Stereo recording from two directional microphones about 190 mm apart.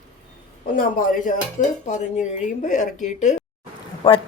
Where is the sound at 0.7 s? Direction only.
45° left (ahead or behind).